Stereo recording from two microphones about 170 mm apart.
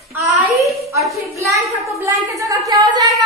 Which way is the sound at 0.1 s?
15° right (ahead or behind).